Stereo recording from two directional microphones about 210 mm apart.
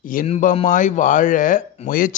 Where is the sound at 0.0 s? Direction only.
40° left (ahead or behind).